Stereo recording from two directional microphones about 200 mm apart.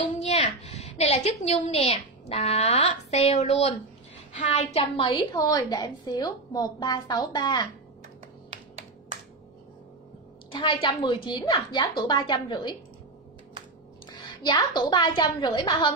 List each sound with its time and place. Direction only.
0.2 s a woman's voice: 35° left (ahead or behind)
10.5 s a woman's voice: 25° left (ahead or behind)
14.4 s a woman's voice: 20° left (ahead or behind)